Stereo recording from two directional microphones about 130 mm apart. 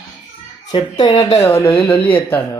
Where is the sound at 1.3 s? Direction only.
20° left (ahead or behind).